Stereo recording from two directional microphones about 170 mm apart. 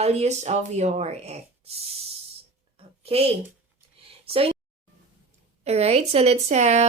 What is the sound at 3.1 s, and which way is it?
Speech, 35° right (ahead or behind).